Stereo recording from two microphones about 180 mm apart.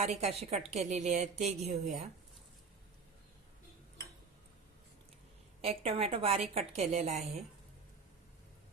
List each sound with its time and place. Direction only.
0.0 s a woman's voice: 35° right (ahead or behind)
5.6 s a woman's voice: 35° right (ahead or behind)